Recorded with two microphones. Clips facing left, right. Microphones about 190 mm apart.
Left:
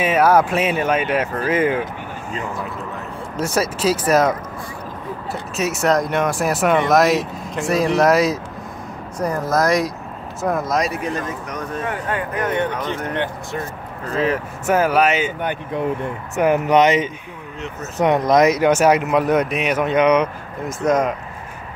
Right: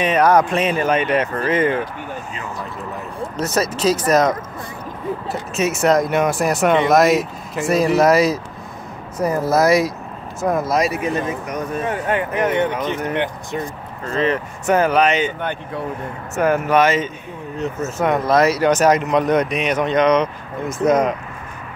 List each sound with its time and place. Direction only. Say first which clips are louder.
0.0 s speech: even; 5° left (ahead or behind)
3.3 s speech: even; 10° left (ahead or behind)
5.6 s speech: right 2 dB; centre (ahead or behind)
11.8 s speech: right 3 dB; 20° right (ahead or behind)
14.1 s speech: right 1 dB; 5° left (ahead or behind)
16.3 s speech: left 1 dB; 15° left (ahead or behind); by 21.1 s centre (ahead or behind)